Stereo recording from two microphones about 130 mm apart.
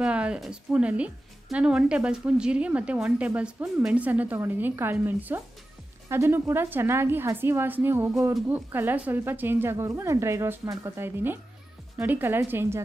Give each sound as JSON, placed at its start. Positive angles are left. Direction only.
{"t": 0.0, "sound": "a woman's voice", "side_deg": -10}